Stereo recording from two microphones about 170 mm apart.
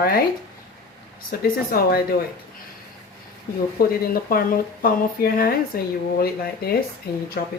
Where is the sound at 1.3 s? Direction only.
60° left (ahead or behind).